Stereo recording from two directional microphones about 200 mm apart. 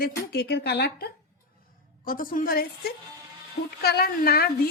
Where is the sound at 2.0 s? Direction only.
45° left (ahead or behind).